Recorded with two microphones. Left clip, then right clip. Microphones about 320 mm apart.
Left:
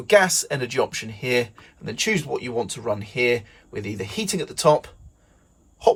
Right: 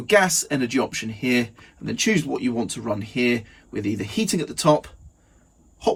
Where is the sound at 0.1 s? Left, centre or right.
Centre.